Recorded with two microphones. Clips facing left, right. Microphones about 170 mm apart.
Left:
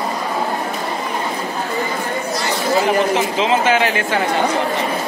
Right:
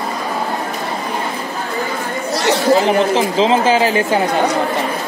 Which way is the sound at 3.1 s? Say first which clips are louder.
Right 3 dB; 30° right (ahead or behind).